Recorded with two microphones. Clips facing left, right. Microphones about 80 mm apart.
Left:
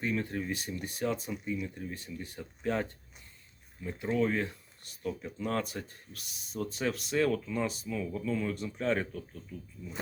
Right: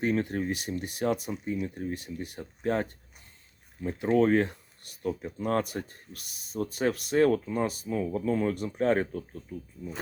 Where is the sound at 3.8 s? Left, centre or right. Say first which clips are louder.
Right 6 dB; right.